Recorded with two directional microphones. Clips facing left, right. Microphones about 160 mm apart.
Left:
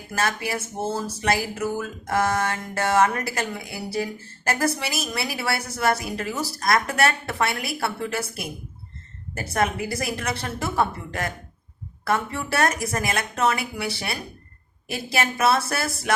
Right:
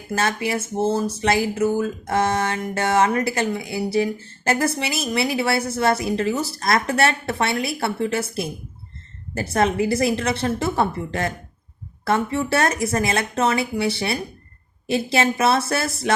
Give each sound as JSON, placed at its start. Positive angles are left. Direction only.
{"t": 0.1, "sound": "speech", "side_deg": -25}